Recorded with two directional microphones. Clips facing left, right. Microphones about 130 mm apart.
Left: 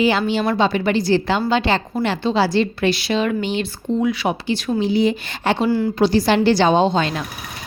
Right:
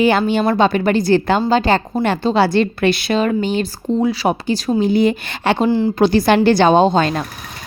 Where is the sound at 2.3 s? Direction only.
55° right (ahead or behind).